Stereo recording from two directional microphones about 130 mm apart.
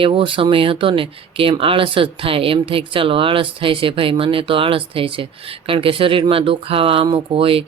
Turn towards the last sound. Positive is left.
turn(degrees=-45)  # may be behind; listen again after turning